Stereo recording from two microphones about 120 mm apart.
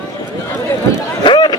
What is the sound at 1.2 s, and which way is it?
Run, 40° left (ahead or behind).